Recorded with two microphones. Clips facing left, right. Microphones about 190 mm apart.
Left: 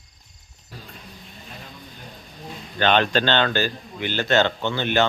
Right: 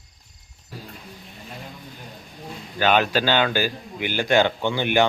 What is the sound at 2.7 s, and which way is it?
Speech, 10° right (ahead or behind).